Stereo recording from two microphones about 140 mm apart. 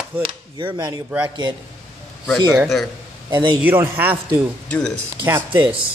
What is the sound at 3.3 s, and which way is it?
Speech, 35° right (ahead or behind).